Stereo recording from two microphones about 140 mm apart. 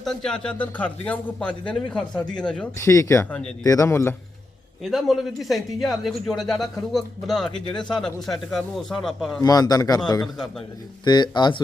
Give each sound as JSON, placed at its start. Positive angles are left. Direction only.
{"t": 0.0, "sound": "speech", "side_deg": 5}
{"t": 2.8, "sound": "a man's voice", "side_deg": 20}
{"t": 4.8, "sound": "a man's voice", "side_deg": 0}
{"t": 9.4, "sound": "a man's voice", "side_deg": 25}
{"t": 11.0, "sound": "speech", "side_deg": 30}